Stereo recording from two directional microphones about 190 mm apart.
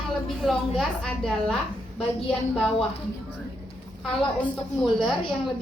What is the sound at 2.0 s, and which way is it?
Speech, 30° left (ahead or behind).